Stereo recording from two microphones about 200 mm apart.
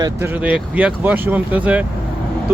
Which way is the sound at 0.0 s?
10° right (ahead or behind).